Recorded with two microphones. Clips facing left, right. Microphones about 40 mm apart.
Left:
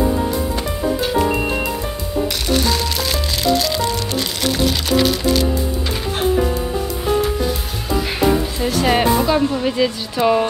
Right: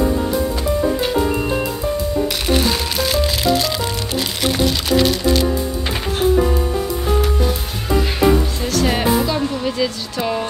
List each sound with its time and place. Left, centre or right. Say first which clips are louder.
2.5 s music: even; centre
4.9 s music: right 1 dB; centre
8.5 s music: left 2 dB; centre
9.2 s a woman's voice: left 3 dB; centre